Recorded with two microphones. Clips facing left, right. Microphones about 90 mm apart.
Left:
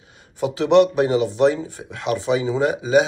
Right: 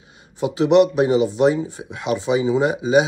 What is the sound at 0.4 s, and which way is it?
Speech, 20° right (ahead or behind).